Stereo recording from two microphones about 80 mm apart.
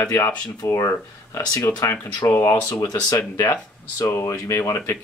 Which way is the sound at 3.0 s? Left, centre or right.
Left.